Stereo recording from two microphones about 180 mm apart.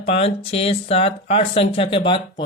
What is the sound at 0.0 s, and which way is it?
Speech, 35° left (ahead or behind).